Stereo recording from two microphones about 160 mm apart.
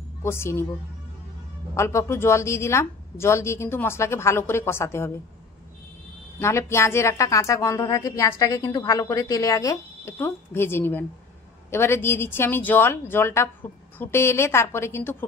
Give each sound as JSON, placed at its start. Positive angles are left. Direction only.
{"t": 0.2, "sound": "a woman's voice", "side_deg": 15}
{"t": 1.8, "sound": "a woman's voice", "side_deg": 15}
{"t": 6.4, "sound": "a woman's voice", "side_deg": 15}